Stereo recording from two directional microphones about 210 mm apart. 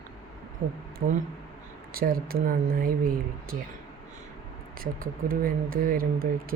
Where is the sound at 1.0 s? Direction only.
50° right (ahead or behind).